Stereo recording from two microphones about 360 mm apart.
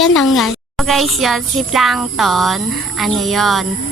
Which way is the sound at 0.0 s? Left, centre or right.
Centre.